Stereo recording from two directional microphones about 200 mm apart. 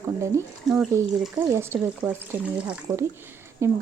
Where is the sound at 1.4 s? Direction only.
15° right (ahead or behind).